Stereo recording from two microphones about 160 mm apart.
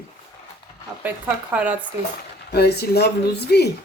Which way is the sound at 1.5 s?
10° right (ahead or behind).